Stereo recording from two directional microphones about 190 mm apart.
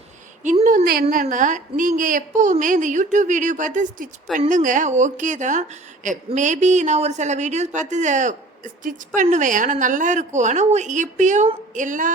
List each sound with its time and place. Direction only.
0.6 s a woman's voice: 45° right (ahead or behind)